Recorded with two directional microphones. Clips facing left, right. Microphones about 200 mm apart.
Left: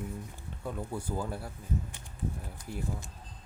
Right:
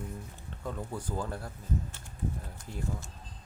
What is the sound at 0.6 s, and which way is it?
Speech, 10° left (ahead or behind).